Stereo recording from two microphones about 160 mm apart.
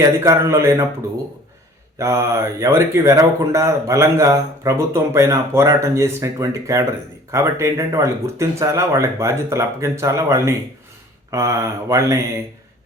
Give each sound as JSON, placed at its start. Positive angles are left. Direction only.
{"t": 0.0, "sound": "speech", "side_deg": -15}
{"t": 2.0, "sound": "speech", "side_deg": -15}